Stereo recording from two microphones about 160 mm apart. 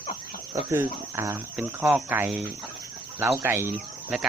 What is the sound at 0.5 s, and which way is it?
Speech, 20° right (ahead or behind).